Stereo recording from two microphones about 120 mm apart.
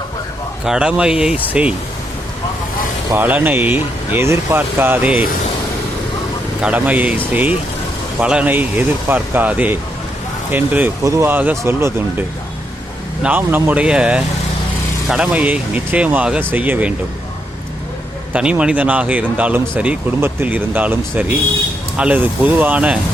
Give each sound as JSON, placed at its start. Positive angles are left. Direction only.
{"t": 0.6, "sound": "speech", "side_deg": -5}
{"t": 3.1, "sound": "speech", "side_deg": -15}
{"t": 6.6, "sound": "speech", "side_deg": -10}
{"t": 13.2, "sound": "speech", "side_deg": -15}
{"t": 18.3, "sound": "speech", "side_deg": -10}